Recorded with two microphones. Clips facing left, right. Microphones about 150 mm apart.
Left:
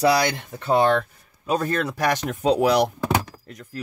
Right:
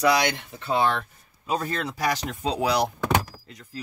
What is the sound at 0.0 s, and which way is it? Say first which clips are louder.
Speech: left 2 dB; 40° left (ahead or behind).